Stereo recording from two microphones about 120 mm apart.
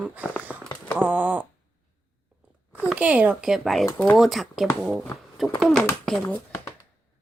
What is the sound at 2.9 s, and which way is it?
Speech, 10° right (ahead or behind).